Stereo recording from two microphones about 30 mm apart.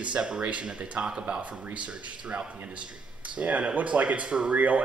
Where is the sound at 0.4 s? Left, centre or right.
Right.